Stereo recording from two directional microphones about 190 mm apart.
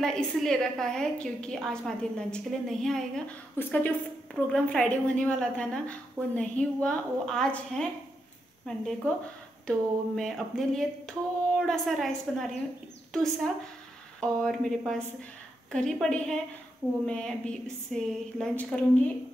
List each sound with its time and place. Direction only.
0.0 s a woman's voice: 5° left (ahead or behind)